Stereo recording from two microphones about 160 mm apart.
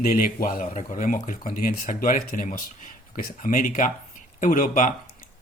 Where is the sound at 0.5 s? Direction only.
50° left (ahead or behind).